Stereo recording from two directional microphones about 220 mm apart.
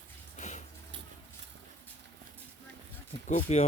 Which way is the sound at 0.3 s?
35° left (ahead or behind).